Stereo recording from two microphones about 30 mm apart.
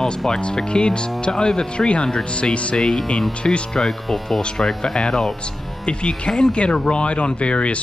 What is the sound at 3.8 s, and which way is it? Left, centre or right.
Hum, centre.